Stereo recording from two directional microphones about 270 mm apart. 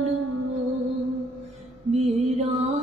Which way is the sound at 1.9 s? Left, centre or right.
Right.